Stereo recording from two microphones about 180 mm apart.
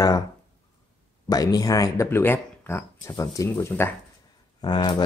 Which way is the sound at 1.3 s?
20° left (ahead or behind).